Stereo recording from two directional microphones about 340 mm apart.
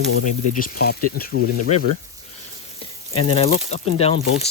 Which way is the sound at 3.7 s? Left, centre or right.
Centre.